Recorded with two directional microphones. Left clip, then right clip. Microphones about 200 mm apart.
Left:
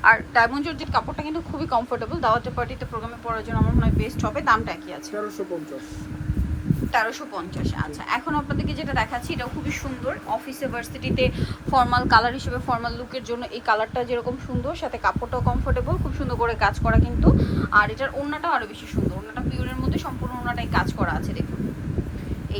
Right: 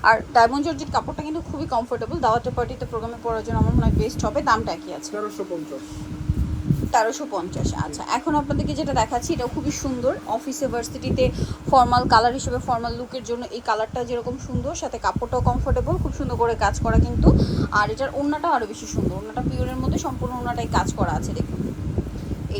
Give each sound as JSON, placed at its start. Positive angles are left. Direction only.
{"t": 0.0, "sound": "a woman's voice", "side_deg": -15}
{"t": 6.9, "sound": "speech", "side_deg": -20}
{"t": 10.6, "sound": "a woman's voice", "side_deg": -20}